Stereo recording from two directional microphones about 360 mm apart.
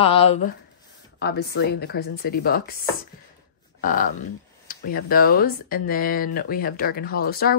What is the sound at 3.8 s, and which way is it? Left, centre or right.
Speech, left.